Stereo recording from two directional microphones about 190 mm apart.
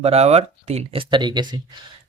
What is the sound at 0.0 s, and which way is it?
Speech, 35° right (ahead or behind).